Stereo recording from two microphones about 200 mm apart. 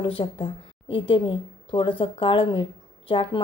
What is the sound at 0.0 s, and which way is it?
A woman's voice, 25° left (ahead or behind).